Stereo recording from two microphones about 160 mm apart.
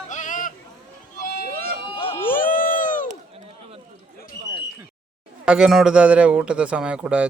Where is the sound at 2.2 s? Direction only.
60° left (ahead or behind).